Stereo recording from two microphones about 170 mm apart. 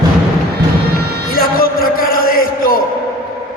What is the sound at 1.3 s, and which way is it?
Music, 60° left (ahead or behind).